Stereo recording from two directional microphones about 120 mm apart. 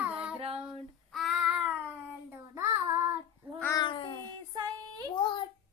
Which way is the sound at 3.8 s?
45° left (ahead or behind).